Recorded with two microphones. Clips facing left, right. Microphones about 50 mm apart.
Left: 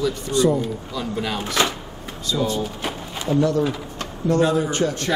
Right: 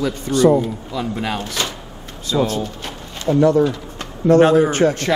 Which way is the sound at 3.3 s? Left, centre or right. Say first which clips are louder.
Right 6 dB; right.